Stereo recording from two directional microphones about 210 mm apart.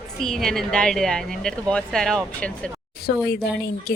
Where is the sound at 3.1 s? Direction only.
55° left (ahead or behind).